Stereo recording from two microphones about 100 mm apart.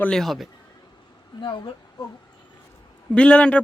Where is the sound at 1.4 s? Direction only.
50° left (ahead or behind).